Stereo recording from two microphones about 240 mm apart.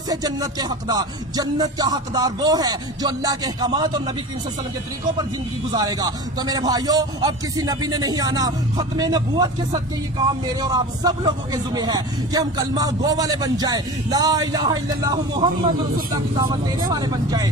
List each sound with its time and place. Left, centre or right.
0.1 s a man's voice: centre
5.7 s a man's voice: centre